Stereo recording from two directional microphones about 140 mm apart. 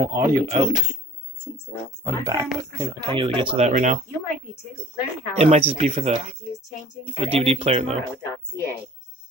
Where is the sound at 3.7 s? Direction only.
60° right (ahead or behind).